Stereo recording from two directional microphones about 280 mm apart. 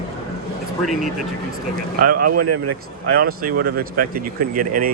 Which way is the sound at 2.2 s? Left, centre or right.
Right.